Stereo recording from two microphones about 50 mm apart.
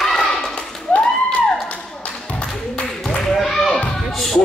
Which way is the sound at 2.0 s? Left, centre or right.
Left.